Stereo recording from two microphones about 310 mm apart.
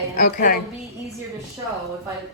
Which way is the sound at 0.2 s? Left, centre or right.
Left.